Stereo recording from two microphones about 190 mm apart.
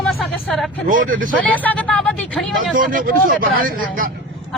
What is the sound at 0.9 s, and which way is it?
Speech, 45° right (ahead or behind).